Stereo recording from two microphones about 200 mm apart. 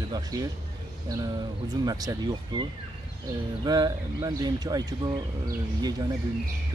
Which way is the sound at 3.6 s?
20° right (ahead or behind).